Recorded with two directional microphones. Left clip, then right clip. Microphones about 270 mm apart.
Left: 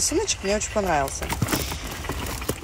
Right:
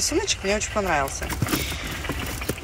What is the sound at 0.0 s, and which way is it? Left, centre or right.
A woman's voice, centre.